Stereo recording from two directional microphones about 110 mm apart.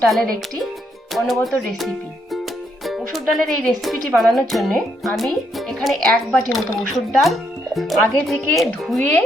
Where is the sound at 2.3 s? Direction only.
Centre (ahead or behind).